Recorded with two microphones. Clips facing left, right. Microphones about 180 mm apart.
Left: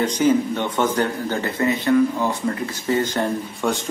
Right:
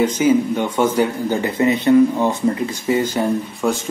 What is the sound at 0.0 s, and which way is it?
Speech, 10° right (ahead or behind).